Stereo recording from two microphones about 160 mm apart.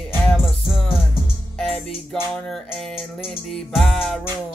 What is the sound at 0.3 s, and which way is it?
Music, centre (ahead or behind).